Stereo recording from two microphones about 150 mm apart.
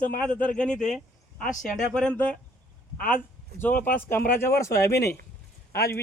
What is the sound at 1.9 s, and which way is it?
Speech, 5° left (ahead or behind).